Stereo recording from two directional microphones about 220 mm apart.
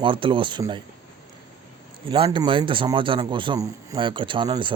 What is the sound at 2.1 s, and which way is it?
Speech, 20° right (ahead or behind).